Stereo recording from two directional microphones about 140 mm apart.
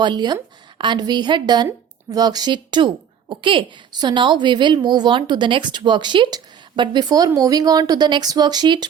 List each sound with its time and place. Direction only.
0.0 s a woman's voice: 30° right (ahead or behind)